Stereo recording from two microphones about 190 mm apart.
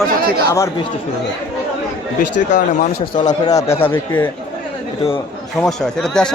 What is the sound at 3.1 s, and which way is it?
A man's voice, 20° left (ahead or behind).